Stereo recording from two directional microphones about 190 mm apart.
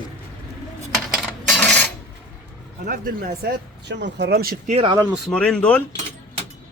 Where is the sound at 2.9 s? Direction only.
50° right (ahead or behind).